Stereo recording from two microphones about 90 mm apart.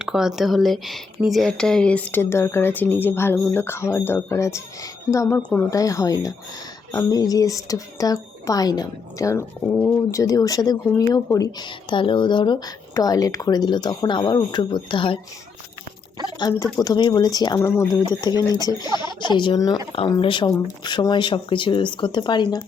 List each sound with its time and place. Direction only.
0.0 s speech: 5° right (ahead or behind); by 2.2 s 15° left (ahead or behind)
2.3 s speech: 30° left (ahead or behind)
5.4 s speech: 15° left (ahead or behind)
5.7 s speech: 40° left (ahead or behind); by 15.2 s 65° left (ahead or behind)
16.8 s speech: 50° left (ahead or behind)
17.6 s speech: 30° left (ahead or behind)
18.0 s speech: 50° left (ahead or behind)
19.5 s speech: 45° left (ahead or behind)
20.2 s speech: 65° left (ahead or behind)
20.5 s speech: 55° left (ahead or behind)